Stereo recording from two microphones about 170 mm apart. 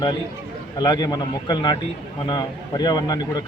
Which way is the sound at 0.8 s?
25° left (ahead or behind).